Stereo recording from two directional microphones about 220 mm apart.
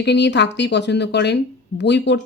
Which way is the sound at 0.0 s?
50° left (ahead or behind).